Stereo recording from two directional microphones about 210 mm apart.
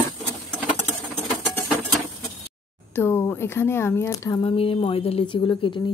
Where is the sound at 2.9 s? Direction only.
10° left (ahead or behind).